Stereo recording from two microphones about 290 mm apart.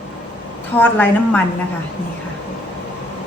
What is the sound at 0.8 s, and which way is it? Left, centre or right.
Speech, centre.